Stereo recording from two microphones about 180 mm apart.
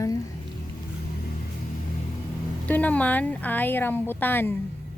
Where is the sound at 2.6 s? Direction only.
10° left (ahead or behind).